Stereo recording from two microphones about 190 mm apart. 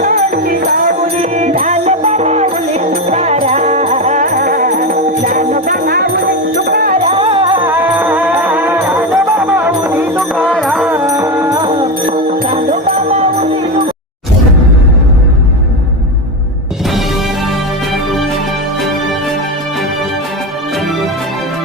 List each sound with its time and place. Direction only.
0.0 s music: 50° right (ahead or behind)
1.2 s music: 40° right (ahead or behind)
7.1 s music: 30° right (ahead or behind)
7.7 s music: 10° right (ahead or behind)
11.0 s music: 15° right (ahead or behind); by 13.5 s 35° right (ahead or behind)